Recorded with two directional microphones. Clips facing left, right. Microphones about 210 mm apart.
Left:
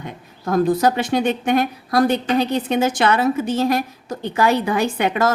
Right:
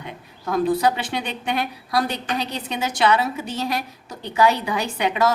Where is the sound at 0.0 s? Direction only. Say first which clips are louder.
Left 3 dB; 45° left (ahead or behind).